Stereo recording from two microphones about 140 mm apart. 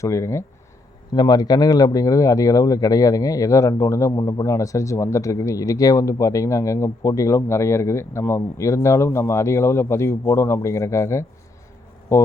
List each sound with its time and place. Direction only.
0.0 s speech: 20° left (ahead or behind)